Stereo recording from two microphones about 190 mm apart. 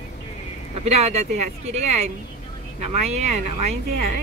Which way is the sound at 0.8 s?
35° right (ahead or behind).